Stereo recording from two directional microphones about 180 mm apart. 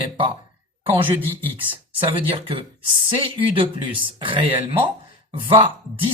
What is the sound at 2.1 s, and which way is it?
Speech, 30° right (ahead or behind).